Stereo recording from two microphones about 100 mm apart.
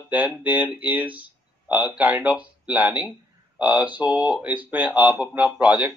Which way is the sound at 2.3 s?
5° right (ahead or behind).